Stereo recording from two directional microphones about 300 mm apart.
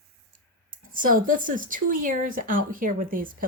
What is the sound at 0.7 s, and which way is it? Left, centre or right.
Speech, right.